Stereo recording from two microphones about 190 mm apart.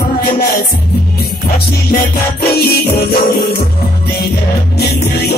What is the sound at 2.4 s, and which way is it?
Music, 55° left (ahead or behind).